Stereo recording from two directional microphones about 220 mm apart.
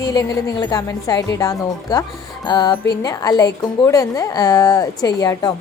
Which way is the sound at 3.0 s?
15° left (ahead or behind).